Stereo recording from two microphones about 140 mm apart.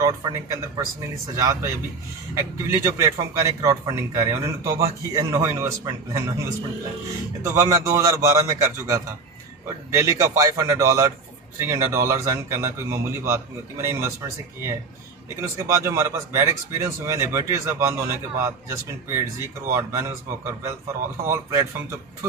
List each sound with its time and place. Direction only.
0.0 s a man's voice: 20° right (ahead or behind)
7.7 s a man's voice: 20° right (ahead or behind)